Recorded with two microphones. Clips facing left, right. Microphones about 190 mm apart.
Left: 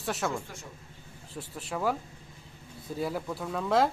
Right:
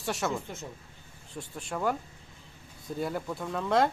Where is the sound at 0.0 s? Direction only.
Centre (ahead or behind).